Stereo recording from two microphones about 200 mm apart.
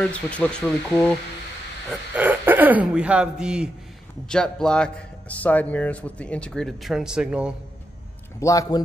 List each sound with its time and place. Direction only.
0.0 s speech: 5° left (ahead or behind)
1.9 s a man's voice: 10° right (ahead or behind)
8.4 s speech: 15° left (ahead or behind)